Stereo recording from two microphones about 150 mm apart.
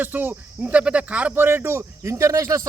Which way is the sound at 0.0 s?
10° right (ahead or behind).